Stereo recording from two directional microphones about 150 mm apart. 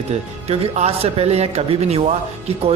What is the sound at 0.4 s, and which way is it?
A man's voice, 40° right (ahead or behind).